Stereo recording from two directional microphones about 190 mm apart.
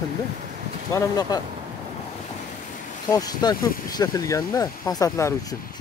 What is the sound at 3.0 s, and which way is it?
Speech, 20° left (ahead or behind).